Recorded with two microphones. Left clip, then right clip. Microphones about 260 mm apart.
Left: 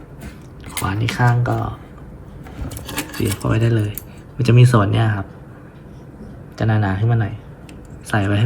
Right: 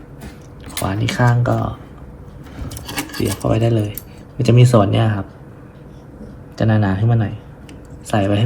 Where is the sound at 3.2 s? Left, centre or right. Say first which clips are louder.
Right 4 dB; centre.